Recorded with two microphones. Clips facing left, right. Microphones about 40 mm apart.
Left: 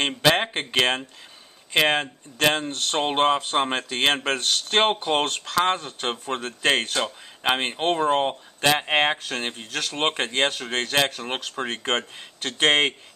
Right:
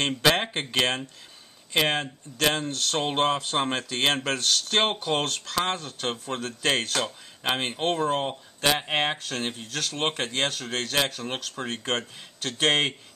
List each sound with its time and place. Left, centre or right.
0.0 s speech: centre